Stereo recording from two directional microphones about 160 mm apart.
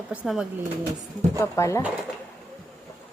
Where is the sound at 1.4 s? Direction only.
20° left (ahead or behind).